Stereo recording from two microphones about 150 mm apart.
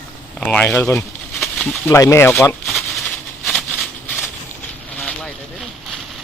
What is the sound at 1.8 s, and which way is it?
Speech, 20° left (ahead or behind).